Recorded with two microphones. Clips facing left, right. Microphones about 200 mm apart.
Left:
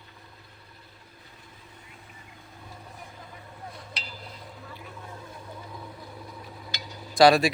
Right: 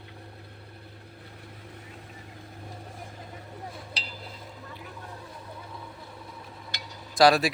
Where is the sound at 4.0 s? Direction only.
30° right (ahead or behind).